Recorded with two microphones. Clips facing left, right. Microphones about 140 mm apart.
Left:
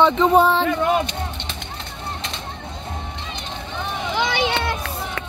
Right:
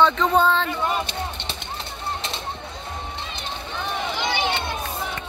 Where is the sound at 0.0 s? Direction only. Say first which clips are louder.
Left 3 dB; 20° left (ahead or behind).